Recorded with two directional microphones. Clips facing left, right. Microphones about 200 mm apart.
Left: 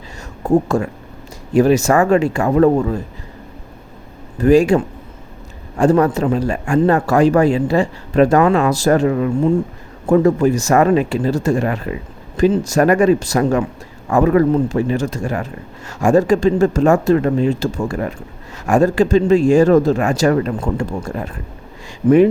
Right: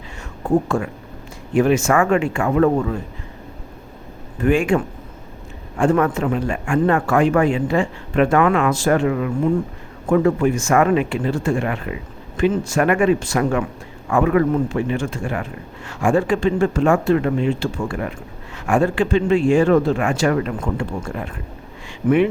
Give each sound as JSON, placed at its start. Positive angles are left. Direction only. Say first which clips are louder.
{"t": 0.4, "sound": "a man's voice", "louder": "left 3 dB", "side_deg": 40}
{"t": 4.4, "sound": "a man's voice", "louder": "left 6 dB", "side_deg": 35}